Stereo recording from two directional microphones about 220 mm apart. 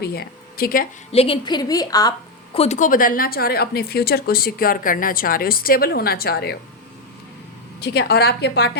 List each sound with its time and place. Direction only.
0.0 s a woman's voice: 45° left (ahead or behind)
1.1 s a woman's voice: 25° left (ahead or behind); by 6.6 s 45° left (ahead or behind)
7.8 s a woman's voice: 45° left (ahead or behind)